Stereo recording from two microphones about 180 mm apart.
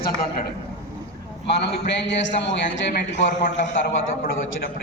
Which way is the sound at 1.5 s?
70° left (ahead or behind).